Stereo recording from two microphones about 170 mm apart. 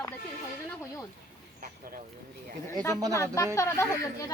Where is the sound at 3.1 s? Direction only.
20° left (ahead or behind).